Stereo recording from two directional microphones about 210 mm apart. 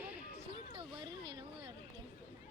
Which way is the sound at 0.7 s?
25° right (ahead or behind).